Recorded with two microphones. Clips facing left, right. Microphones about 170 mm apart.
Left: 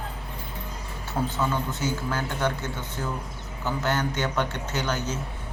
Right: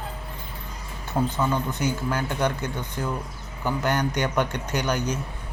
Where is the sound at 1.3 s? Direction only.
15° right (ahead or behind).